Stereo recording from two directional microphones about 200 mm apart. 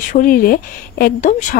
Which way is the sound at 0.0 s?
40° left (ahead or behind).